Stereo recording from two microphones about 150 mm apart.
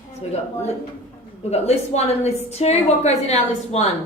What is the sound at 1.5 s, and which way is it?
A woman's voice, 45° left (ahead or behind).